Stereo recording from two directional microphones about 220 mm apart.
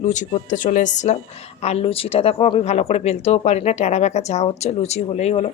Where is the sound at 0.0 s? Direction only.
30° left (ahead or behind).